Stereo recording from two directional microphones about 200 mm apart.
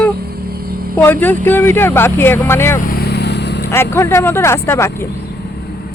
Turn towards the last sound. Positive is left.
turn(degrees=10)  # may be behind; listen again after turning